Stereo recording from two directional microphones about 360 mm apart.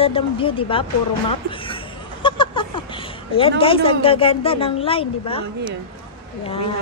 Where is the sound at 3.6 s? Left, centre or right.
Centre.